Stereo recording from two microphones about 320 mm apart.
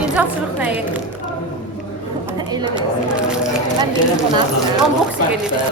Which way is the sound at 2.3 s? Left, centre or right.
Centre.